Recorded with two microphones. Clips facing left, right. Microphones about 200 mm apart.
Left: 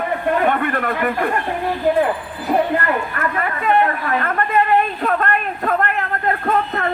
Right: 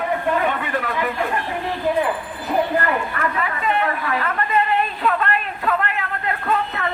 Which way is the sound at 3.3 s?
50° left (ahead or behind).